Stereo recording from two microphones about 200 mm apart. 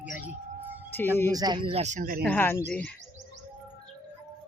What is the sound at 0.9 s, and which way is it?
Speech, 10° left (ahead or behind).